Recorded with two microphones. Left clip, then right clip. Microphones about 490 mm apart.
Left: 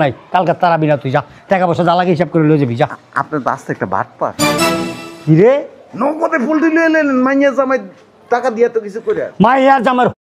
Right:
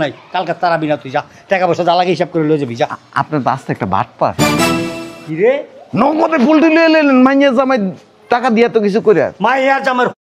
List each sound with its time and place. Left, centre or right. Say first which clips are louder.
0.0 s speech: left 4 dB; left; by 2.9 s centre
2.9 s speech: right 1 dB; centre
5.3 s a man's voice: left 3 dB; left
5.9 s a man's voice: right 3 dB; right
9.4 s a man's voice: left 3 dB; left